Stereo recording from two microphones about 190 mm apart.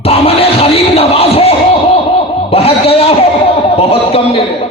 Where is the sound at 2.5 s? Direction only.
30° left (ahead or behind).